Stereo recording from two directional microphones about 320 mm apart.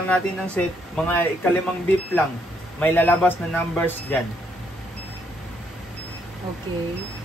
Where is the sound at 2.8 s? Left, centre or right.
Centre.